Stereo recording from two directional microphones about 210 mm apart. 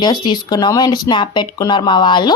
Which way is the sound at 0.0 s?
20° left (ahead or behind).